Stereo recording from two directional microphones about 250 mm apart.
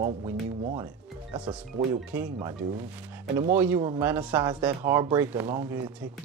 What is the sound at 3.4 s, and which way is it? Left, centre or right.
Speech, centre.